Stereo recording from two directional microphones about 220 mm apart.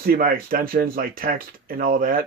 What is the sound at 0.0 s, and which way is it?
Speech, 40° right (ahead or behind).